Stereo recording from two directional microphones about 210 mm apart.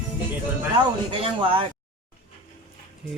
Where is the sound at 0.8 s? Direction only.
25° right (ahead or behind).